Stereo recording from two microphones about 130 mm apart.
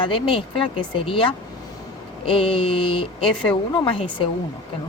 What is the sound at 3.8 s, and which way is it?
Speech, 40° left (ahead or behind).